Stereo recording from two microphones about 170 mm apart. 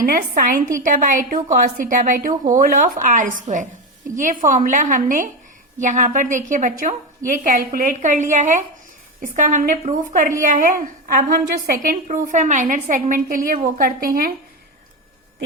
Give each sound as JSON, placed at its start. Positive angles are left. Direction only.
{"t": 0.0, "sound": "a woman's voice", "side_deg": -55}